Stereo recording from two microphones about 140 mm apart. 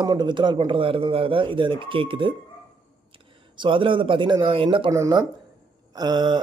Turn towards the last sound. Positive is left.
turn(degrees=-30)  # may be behind; listen again after turning